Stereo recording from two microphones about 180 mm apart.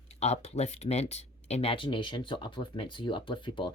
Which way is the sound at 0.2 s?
35° left (ahead or behind).